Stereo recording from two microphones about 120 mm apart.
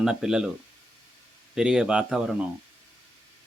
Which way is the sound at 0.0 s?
5° right (ahead or behind).